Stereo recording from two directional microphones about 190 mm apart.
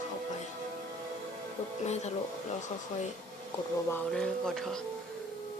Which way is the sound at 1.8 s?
35° left (ahead or behind).